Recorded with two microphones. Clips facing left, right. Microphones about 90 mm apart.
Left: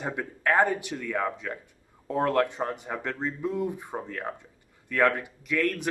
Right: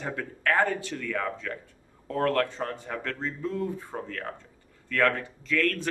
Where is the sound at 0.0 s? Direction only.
15° left (ahead or behind).